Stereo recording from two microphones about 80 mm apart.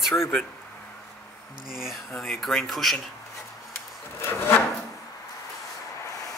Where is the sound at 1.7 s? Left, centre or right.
Centre.